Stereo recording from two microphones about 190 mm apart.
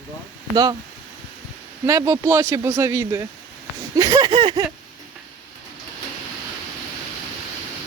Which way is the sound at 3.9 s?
20° right (ahead or behind).